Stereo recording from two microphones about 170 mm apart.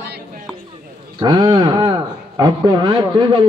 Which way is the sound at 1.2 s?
25° right (ahead or behind).